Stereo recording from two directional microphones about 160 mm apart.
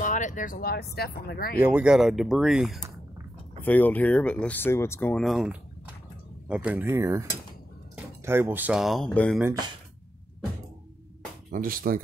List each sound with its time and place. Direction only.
0.0 s speech: 50° left (ahead or behind); by 1.6 s 75° left (ahead or behind)
1.6 s speech: 10° right (ahead or behind)
3.6 s speech: 10° left (ahead or behind)
5.1 s speech: centre (ahead or behind)
9.4 s speech: 20° right (ahead or behind)
11.5 s speech: 60° right (ahead or behind)